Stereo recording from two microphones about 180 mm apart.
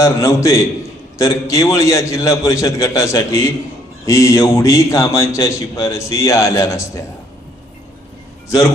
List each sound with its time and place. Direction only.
0.0 s a man's voice: 15° left (ahead or behind)